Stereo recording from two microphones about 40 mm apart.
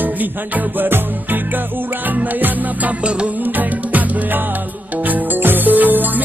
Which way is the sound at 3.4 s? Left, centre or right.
Right.